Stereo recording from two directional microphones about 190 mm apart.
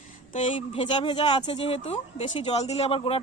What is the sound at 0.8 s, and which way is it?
Speech, 25° left (ahead or behind).